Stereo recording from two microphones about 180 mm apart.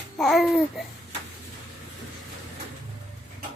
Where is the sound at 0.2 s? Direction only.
Centre (ahead or behind).